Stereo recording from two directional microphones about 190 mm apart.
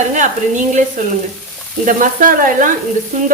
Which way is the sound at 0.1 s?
40° right (ahead or behind).